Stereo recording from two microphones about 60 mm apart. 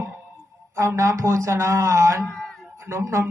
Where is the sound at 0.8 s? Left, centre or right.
Right.